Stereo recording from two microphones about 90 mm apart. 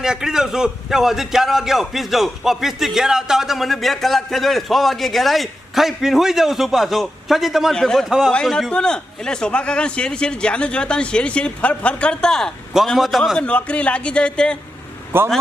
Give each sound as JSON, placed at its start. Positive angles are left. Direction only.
{"t": 0.0, "sound": "a man's voice", "side_deg": -5}
{"t": 8.3, "sound": "a man's voice", "side_deg": 10}
{"t": 13.4, "sound": "a man's voice", "side_deg": 15}
{"t": 15.1, "sound": "speech", "side_deg": -25}